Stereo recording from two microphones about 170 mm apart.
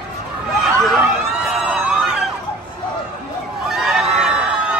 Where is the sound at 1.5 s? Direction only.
Centre (ahead or behind).